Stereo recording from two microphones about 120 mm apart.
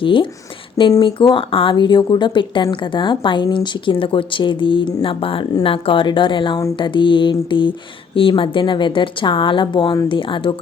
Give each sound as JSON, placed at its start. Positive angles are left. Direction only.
{"t": 0.0, "sound": "speech", "side_deg": 45}